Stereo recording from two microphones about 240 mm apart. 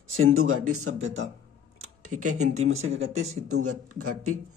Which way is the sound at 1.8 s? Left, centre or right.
Right.